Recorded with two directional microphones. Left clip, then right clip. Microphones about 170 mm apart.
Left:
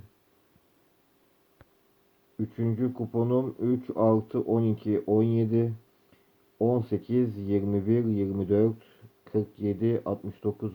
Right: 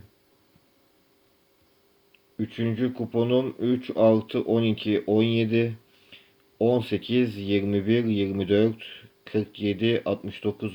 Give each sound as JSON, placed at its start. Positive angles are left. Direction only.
{"t": 2.5, "sound": "speech", "side_deg": -15}